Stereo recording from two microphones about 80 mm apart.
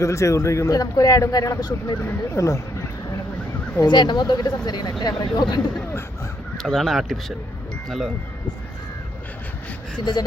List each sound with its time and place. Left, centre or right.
0.0 s a man's voice: left
2.0 s speech: left
3.8 s speech: left
6.6 s speech: centre
10.0 s speech: left